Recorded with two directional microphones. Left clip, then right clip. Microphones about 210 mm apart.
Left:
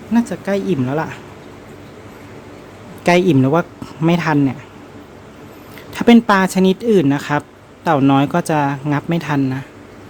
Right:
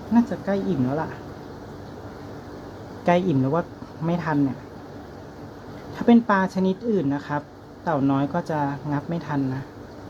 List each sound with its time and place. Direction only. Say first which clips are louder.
0.1 s speech: left 5 dB; 60° left (ahead or behind)
3.0 s speech: left 8 dB; 55° left (ahead or behind)
5.9 s speech: left 7 dB; 60° left (ahead or behind)